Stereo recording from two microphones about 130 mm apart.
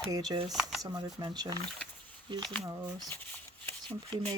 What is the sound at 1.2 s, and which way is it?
Speech, 30° right (ahead or behind).